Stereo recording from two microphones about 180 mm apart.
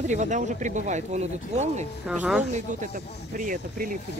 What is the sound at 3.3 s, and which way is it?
Speech, 50° right (ahead or behind).